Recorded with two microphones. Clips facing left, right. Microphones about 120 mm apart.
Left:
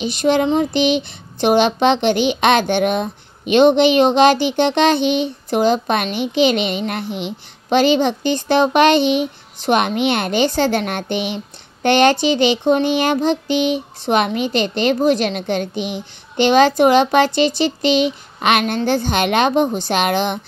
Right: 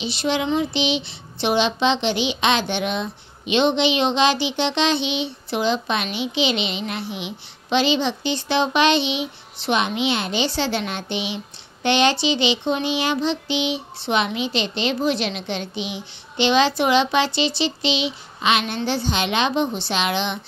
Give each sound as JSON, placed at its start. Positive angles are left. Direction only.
{"t": 0.0, "sound": "a child's voice", "side_deg": 50}